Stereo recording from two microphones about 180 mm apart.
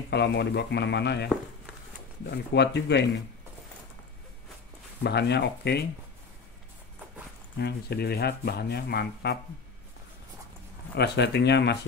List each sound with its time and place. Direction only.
0.1 s speech: 70° left (ahead or behind)
2.3 s speech: 70° left (ahead or behind)
5.0 s speech: 70° left (ahead or behind)
7.5 s speech: 65° left (ahead or behind)
11.0 s speech: 70° left (ahead or behind)